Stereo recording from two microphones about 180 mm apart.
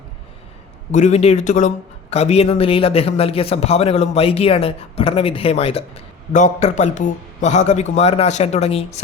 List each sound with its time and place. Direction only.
0.9 s speech: 40° left (ahead or behind)